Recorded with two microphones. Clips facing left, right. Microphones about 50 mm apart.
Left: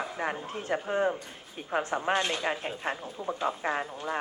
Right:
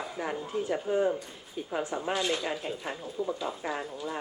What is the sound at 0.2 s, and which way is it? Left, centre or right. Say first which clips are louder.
Speech: right 1 dB; left.